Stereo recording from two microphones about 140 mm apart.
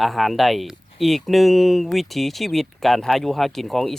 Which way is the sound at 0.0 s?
Centre (ahead or behind).